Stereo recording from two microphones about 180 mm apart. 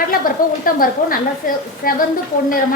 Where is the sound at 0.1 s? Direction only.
50° left (ahead or behind).